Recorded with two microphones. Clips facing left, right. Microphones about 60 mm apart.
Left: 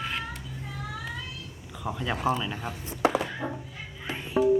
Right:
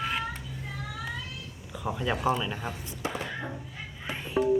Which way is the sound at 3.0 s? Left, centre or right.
Left.